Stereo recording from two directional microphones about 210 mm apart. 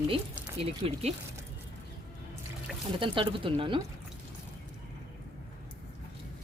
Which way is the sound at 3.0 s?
25° right (ahead or behind).